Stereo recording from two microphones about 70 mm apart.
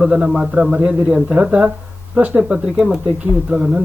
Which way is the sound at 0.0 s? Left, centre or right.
Centre.